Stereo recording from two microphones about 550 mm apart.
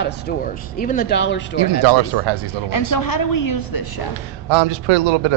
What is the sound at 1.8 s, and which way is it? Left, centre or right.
Speech, right.